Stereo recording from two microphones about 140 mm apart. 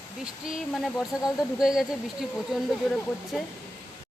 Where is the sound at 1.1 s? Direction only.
Centre (ahead or behind).